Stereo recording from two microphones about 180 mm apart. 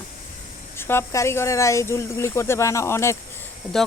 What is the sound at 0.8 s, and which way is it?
Speech, 15° left (ahead or behind).